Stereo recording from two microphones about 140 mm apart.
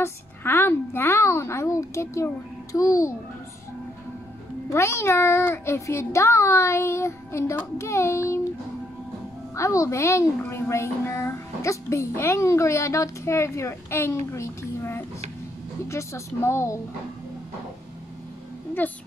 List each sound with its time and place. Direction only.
0.0 s a woman's voice: 15° left (ahead or behind)
4.6 s a woman's voice: 20° left (ahead or behind)
9.6 s a woman's voice: 20° left (ahead or behind)